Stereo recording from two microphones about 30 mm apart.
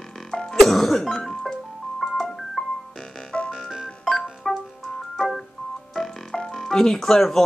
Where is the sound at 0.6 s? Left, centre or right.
Centre.